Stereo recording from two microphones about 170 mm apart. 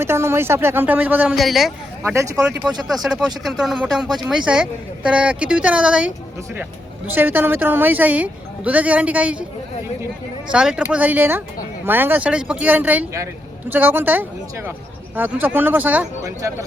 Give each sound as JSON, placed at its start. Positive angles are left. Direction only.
{"t": 0.0, "sound": "a woman's voice", "side_deg": -15}
{"t": 2.0, "sound": "a woman's voice", "side_deg": -20}
{"t": 2.4, "sound": "speech", "side_deg": -5}
{"t": 7.1, "sound": "a woman's voice", "side_deg": -10}
{"t": 10.5, "sound": "a woman's voice", "side_deg": -5}